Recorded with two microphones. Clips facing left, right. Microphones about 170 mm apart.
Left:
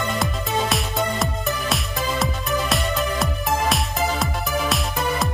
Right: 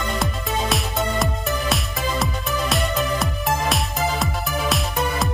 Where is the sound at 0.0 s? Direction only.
Centre (ahead or behind).